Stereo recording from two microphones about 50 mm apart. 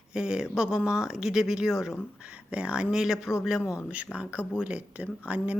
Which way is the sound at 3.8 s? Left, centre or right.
Right.